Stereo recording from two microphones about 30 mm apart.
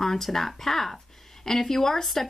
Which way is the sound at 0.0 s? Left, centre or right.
Centre.